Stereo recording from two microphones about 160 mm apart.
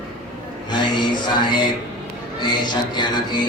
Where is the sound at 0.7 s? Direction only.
30° left (ahead or behind).